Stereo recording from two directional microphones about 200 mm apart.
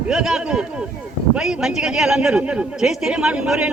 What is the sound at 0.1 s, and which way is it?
A man's voice, 5° right (ahead or behind).